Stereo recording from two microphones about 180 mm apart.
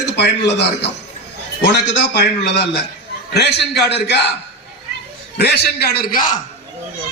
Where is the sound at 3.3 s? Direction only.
70° left (ahead or behind).